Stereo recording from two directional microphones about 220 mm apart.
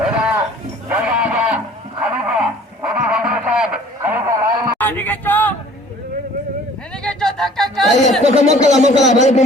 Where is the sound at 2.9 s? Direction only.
5° right (ahead or behind).